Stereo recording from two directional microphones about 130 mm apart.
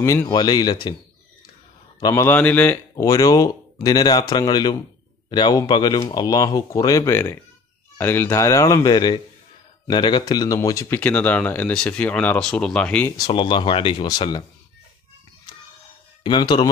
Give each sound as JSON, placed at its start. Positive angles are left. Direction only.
{"t": 0.0, "sound": "speech", "side_deg": 25}
{"t": 2.1, "sound": "speech", "side_deg": 15}
{"t": 3.0, "sound": "speech", "side_deg": 25}
{"t": 11.0, "sound": "speech", "side_deg": 10}
{"t": 13.2, "sound": "speech", "side_deg": 40}
{"t": 16.3, "sound": "speech", "side_deg": 35}